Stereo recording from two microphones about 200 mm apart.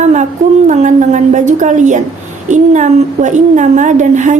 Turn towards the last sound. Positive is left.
turn(degrees=-40)  # may be behind; listen again after turning